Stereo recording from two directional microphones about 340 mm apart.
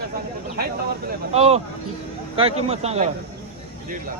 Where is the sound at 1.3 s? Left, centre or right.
Centre.